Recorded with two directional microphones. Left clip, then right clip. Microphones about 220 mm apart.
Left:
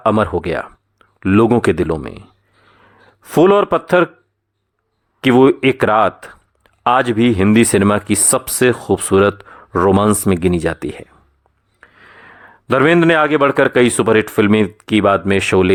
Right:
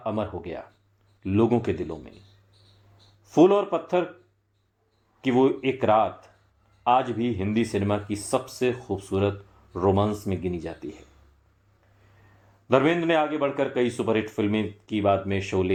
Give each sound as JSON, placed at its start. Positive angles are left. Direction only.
{"t": 0.0, "sound": "speech", "side_deg": 40}
{"t": 3.2, "sound": "a man's voice", "side_deg": 45}
{"t": 5.2, "sound": "a man's voice", "side_deg": 45}
{"t": 12.7, "sound": "a man's voice", "side_deg": 40}